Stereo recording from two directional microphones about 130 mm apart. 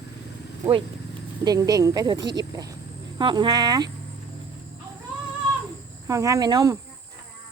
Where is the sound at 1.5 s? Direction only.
30° right (ahead or behind).